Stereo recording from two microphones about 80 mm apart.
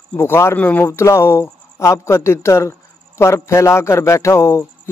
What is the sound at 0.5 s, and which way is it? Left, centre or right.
Speech, left.